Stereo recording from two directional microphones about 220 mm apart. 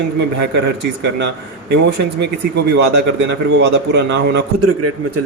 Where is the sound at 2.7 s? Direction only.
50° right (ahead or behind).